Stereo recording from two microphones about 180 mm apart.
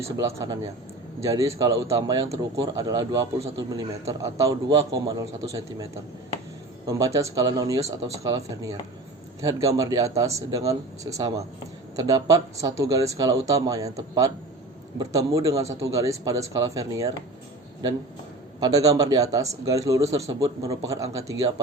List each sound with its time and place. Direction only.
0.2 s a man's voice: 15° right (ahead or behind)
18.6 s a man's voice: 20° right (ahead or behind)